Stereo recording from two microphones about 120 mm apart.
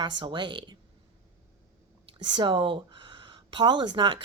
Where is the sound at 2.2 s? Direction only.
40° right (ahead or behind).